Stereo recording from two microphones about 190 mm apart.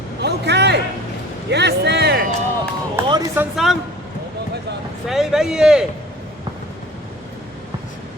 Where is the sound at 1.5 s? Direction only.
60° right (ahead or behind).